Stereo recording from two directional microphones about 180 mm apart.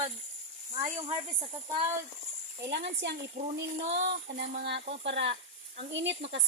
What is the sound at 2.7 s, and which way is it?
Speech, 70° right (ahead or behind).